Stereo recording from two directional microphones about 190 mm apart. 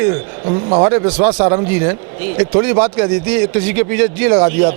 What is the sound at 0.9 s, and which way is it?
A man's voice, 15° right (ahead or behind).